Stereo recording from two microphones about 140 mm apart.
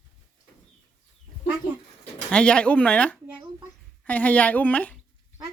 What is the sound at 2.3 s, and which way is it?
Speech, 5° left (ahead or behind).